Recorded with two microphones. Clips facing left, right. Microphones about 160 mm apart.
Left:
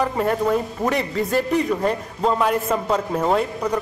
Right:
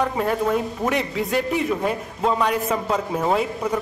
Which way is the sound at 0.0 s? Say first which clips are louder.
Left 1 dB; centre (ahead or behind).